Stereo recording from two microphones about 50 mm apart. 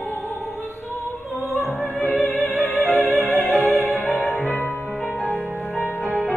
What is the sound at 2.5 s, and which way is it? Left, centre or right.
Music, left.